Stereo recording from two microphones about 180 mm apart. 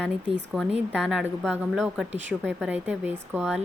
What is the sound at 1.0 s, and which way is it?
Speech, 5° right (ahead or behind).